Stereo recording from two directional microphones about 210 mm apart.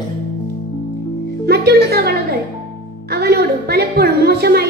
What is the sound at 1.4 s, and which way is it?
Speech, 50° right (ahead or behind).